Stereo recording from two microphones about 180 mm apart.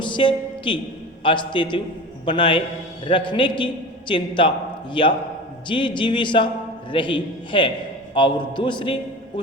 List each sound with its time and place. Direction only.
0.0 s a woman's voice: 25° left (ahead or behind)